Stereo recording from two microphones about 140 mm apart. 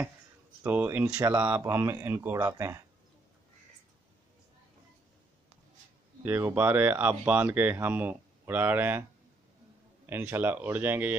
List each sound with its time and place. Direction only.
0.7 s speech: 15° right (ahead or behind)
6.2 s speech: 15° right (ahead or behind)
10.0 s speech: 15° right (ahead or behind)